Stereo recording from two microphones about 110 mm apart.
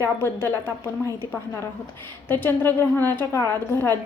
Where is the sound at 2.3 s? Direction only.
20° left (ahead or behind).